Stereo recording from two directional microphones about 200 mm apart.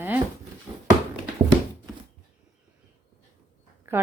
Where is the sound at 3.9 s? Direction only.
10° right (ahead or behind).